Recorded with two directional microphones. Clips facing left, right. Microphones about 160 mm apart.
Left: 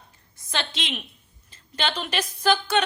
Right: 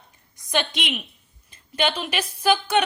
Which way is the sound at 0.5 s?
15° right (ahead or behind).